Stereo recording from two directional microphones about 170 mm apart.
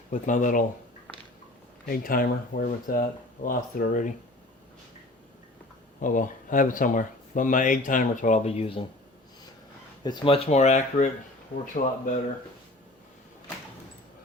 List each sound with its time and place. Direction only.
0.1 s speech: 50° left (ahead or behind)
1.9 s speech: 60° left (ahead or behind)
6.0 s speech: 50° left (ahead or behind); by 8.9 s 30° left (ahead or behind)
10.0 s speech: 25° left (ahead or behind); by 12.2 s 55° left (ahead or behind)